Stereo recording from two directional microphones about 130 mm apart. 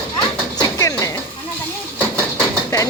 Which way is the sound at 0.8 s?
25° left (ahead or behind).